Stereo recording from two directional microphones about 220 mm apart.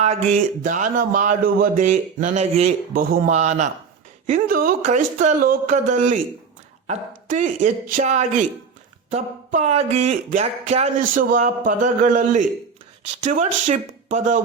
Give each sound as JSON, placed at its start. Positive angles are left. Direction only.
{"t": 0.0, "sound": "speech", "side_deg": -30}
{"t": 2.9, "sound": "speech", "side_deg": -40}